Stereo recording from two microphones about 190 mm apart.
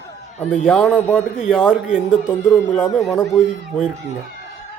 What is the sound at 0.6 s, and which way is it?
A man's voice, 5° left (ahead or behind).